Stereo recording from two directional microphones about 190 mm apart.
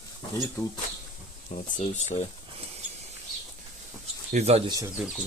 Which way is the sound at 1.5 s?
40° left (ahead or behind).